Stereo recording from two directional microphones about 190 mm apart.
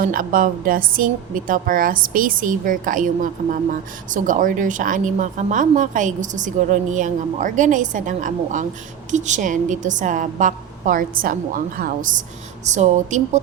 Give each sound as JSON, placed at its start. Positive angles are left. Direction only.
{"t": 0.0, "sound": "a woman's voice", "side_deg": -45}